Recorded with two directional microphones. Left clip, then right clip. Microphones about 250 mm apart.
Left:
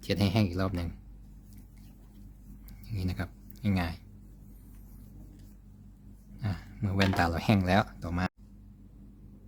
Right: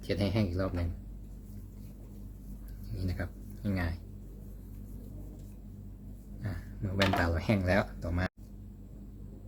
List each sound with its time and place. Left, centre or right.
0.0 s speech: left
2.9 s speech: left
6.4 s speech: left